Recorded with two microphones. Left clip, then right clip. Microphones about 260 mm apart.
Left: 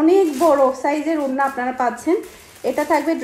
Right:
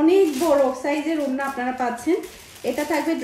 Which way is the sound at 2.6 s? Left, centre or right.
Left.